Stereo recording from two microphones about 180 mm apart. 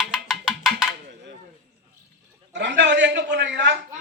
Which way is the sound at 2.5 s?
75° right (ahead or behind).